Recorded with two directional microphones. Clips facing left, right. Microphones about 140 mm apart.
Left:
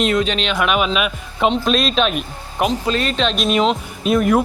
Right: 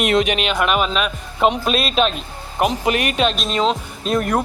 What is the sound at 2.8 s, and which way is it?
Speech, 15° right (ahead or behind).